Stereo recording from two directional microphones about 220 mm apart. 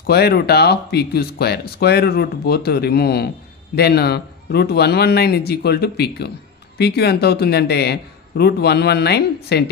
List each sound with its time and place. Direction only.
0.0 s speech: 45° left (ahead or behind)